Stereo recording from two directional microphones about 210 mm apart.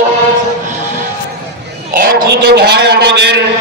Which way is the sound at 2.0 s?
50° right (ahead or behind).